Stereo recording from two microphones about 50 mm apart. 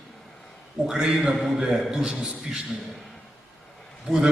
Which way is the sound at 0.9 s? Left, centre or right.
Centre.